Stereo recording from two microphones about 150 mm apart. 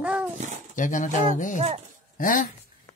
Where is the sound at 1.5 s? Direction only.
45° right (ahead or behind).